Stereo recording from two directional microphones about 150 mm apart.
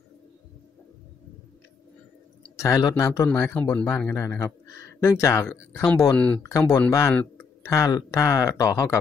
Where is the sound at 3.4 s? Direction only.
10° left (ahead or behind).